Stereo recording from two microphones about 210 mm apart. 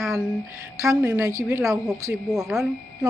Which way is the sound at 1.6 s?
Centre (ahead or behind).